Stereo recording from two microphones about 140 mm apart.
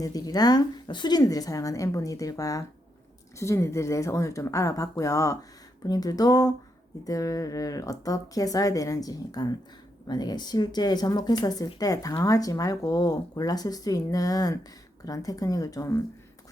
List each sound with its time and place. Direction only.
0.0 s speech: 25° left (ahead or behind)